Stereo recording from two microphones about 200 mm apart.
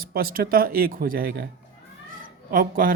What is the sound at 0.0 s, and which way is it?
Speech, 45° right (ahead or behind).